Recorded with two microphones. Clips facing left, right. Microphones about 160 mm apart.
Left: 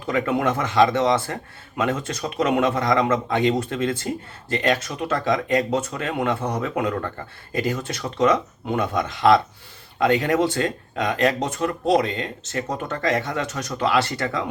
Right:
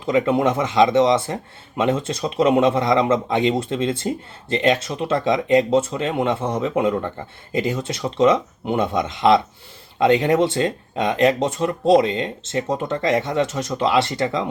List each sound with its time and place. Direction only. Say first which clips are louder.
0.0 s speech: right 4 dB; 25° right (ahead or behind)